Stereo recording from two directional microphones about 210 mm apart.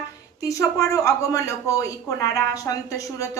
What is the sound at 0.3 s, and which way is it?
Speech, 15° left (ahead or behind).